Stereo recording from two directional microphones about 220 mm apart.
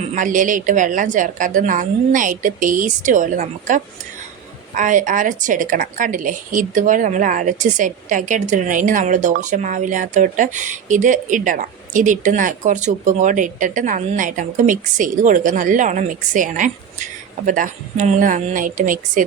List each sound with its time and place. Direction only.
0.1 s speech: 35° right (ahead or behind)